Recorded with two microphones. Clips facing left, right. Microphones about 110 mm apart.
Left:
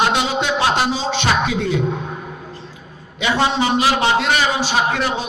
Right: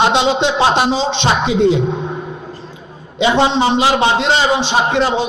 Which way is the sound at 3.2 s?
25° right (ahead or behind).